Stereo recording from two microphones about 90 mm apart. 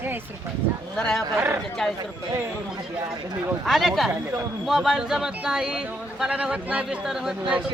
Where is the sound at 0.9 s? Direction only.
5° left (ahead or behind).